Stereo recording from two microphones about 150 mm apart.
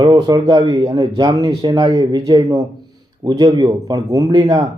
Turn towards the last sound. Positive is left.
turn(degrees=-25)  # may be behind; listen again after turning